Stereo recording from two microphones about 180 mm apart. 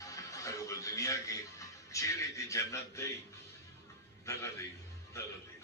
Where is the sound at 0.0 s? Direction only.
20° left (ahead or behind).